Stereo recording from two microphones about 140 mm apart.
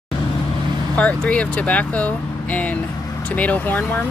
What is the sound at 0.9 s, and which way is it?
Speech, 10° left (ahead or behind).